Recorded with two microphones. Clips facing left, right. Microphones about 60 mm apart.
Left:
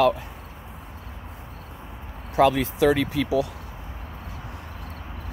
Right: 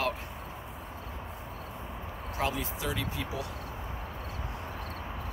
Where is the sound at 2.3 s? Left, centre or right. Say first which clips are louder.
Left 14 dB; left.